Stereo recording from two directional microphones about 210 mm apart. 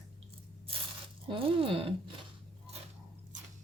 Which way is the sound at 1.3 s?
25° right (ahead or behind).